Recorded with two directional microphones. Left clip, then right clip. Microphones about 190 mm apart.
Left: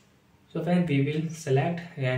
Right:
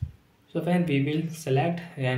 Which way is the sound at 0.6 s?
25° right (ahead or behind).